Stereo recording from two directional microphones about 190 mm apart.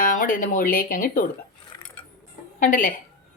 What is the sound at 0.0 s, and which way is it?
Speech, 45° left (ahead or behind).